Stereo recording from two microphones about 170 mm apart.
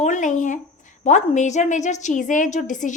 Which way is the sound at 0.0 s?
45° left (ahead or behind).